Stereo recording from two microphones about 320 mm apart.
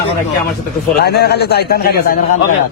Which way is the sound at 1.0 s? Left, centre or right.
Left.